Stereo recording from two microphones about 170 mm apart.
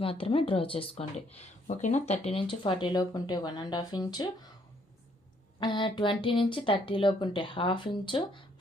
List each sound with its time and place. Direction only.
0.0 s speech: 35° left (ahead or behind)
5.5 s speech: 30° left (ahead or behind)